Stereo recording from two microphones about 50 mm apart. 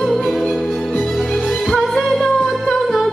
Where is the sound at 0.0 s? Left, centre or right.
Centre.